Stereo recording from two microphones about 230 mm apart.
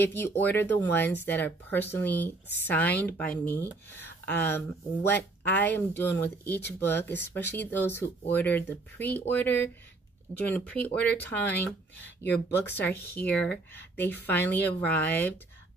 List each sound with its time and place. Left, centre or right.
0.0 s speech: centre
10.3 s speech: centre